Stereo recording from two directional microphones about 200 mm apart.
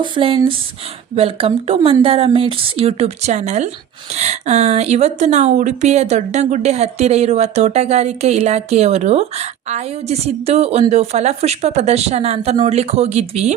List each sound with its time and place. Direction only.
0.0 s a woman's voice: 25° right (ahead or behind)